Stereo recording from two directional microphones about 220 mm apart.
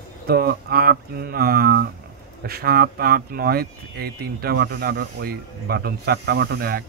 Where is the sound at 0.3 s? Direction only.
45° right (ahead or behind).